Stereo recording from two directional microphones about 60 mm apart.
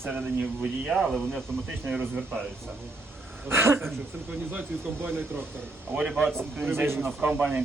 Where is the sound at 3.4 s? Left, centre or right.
Right.